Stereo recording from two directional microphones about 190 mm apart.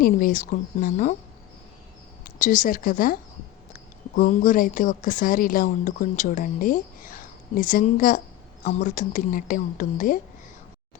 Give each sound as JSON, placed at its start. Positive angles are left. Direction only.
{"t": 0.0, "sound": "speech", "side_deg": 45}
{"t": 2.4, "sound": "speech", "side_deg": 45}